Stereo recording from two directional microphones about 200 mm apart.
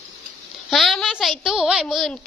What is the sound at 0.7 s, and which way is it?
A child's voice, centre (ahead or behind).